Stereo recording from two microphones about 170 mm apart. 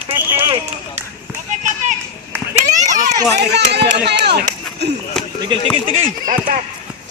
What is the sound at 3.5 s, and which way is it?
Speech, 75° right (ahead or behind).